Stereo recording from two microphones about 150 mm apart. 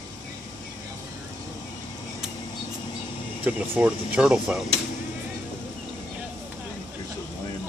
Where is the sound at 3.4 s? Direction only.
10° right (ahead or behind).